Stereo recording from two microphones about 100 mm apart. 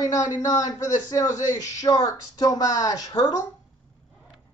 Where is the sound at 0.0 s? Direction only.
40° left (ahead or behind).